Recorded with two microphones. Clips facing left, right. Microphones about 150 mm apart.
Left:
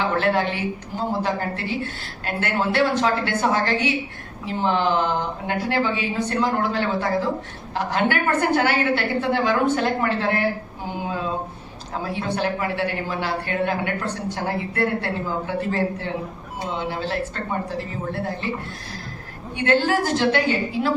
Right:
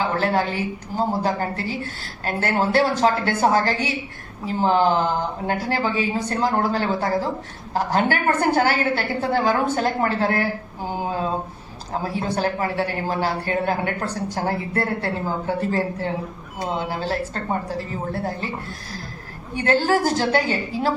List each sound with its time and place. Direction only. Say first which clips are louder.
0.9 s speech: right 3 dB; 40° right (ahead or behind)
12.1 s speech: even; 40° right (ahead or behind)
19.5 s speech: right 1 dB; 40° right (ahead or behind)